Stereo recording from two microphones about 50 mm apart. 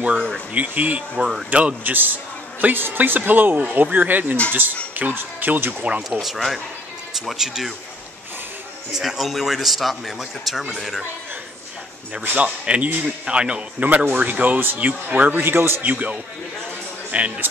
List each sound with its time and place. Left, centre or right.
0.6 s speech: right
1.1 s speech: centre
1.5 s speech: right
1.9 s a man's voice: right
3.0 s speech: right
6.2 s speech: centre
8.9 s speech: centre
12.4 s speech: right
13.8 s speech: right
15.3 s a man's voice: right
15.8 s speech: right